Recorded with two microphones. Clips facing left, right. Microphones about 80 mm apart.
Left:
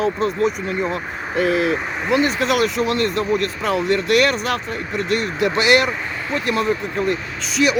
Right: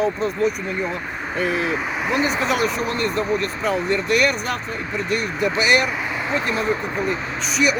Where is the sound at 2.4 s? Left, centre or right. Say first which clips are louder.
Left 3 dB; left.